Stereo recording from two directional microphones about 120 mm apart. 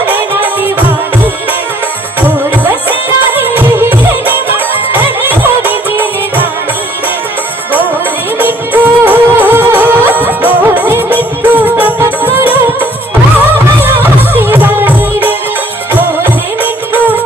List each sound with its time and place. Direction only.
0.6 s music: 15° right (ahead or behind)
3.3 s music: 15° right (ahead or behind)
8.4 s music: 15° right (ahead or behind)